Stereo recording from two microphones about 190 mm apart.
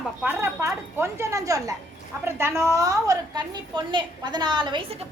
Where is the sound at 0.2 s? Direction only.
10° right (ahead or behind); by 4.9 s 25° right (ahead or behind).